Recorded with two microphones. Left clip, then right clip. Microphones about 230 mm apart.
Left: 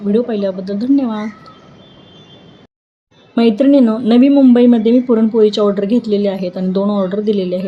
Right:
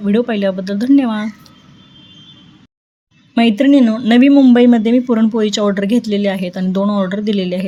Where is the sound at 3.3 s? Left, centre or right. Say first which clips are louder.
Left 1 dB; right.